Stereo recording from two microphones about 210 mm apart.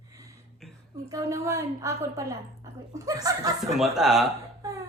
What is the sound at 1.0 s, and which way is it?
A woman's voice, 15° right (ahead or behind).